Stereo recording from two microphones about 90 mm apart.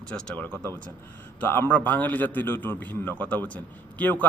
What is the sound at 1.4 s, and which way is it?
A man's voice, 20° left (ahead or behind).